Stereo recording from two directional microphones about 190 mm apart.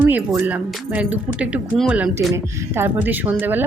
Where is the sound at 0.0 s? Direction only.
5° right (ahead or behind).